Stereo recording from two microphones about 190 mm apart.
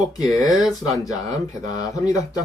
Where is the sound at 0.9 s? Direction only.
20° left (ahead or behind).